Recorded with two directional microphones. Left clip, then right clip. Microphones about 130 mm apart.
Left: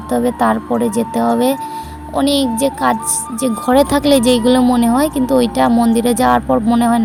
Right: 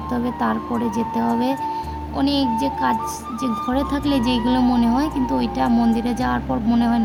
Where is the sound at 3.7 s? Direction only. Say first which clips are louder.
Left 13 dB; 60° left (ahead or behind).